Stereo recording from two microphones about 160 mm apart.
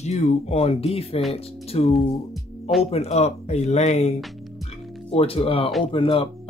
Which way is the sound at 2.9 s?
40° left (ahead or behind).